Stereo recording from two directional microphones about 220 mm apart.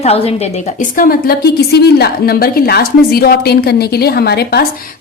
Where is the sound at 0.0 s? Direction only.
25° left (ahead or behind).